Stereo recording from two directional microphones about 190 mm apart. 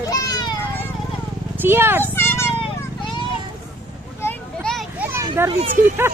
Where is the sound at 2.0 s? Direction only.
10° left (ahead or behind).